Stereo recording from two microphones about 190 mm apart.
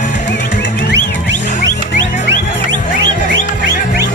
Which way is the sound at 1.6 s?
75° right (ahead or behind).